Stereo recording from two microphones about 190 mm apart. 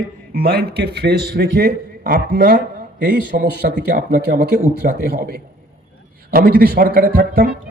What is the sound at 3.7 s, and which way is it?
A man's voice, 55° right (ahead or behind).